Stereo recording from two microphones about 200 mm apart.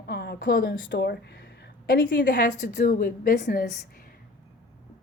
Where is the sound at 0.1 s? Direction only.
55° left (ahead or behind).